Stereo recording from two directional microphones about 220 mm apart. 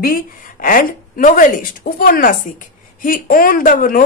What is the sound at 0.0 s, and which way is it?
A woman's voice, 40° left (ahead or behind).